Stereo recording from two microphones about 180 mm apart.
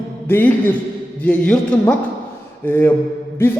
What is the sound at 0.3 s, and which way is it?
A man's voice, 10° left (ahead or behind).